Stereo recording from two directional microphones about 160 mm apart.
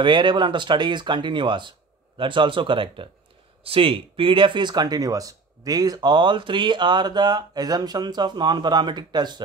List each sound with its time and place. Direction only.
0.0 s speech: 30° right (ahead or behind)